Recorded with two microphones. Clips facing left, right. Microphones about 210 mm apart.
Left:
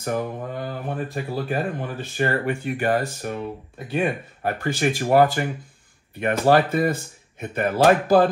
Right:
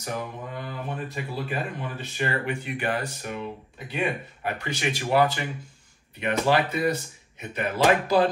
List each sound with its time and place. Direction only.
0.0 s speech: 50° left (ahead or behind)